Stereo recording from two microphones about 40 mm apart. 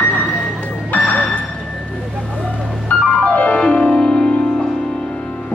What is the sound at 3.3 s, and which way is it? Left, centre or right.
Music, left.